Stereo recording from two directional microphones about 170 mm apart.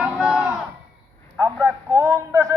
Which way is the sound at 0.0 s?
5° right (ahead or behind).